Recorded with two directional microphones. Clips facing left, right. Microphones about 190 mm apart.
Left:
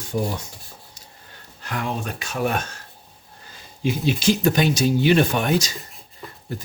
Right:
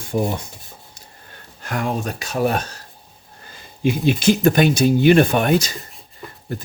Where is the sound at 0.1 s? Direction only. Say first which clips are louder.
Right 4 dB; 55° right (ahead or behind).